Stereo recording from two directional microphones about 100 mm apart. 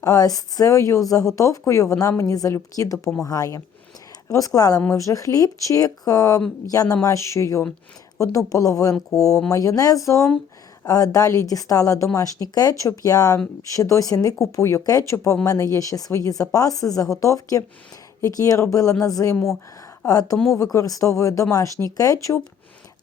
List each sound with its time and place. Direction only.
0.0 s speech: 35° left (ahead or behind)
20.3 s speech: 5° left (ahead or behind)
20.7 s speech: 35° left (ahead or behind)